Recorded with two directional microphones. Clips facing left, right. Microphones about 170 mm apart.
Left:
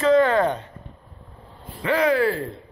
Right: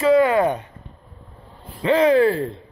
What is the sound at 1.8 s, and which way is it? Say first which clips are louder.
Speech: right 5 dB; 25° right (ahead or behind).